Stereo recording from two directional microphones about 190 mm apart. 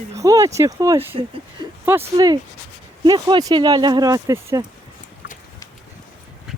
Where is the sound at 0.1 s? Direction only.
15° right (ahead or behind).